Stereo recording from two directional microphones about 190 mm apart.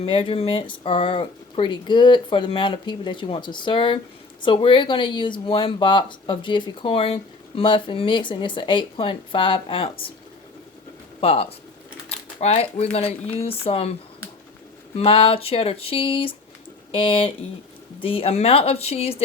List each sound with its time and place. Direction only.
0.0 s speech: 30° left (ahead or behind)
11.2 s a woman's voice: 30° left (ahead or behind)
14.9 s a woman's voice: 30° left (ahead or behind)